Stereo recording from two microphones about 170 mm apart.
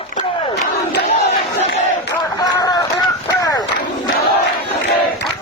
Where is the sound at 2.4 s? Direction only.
20° left (ahead or behind).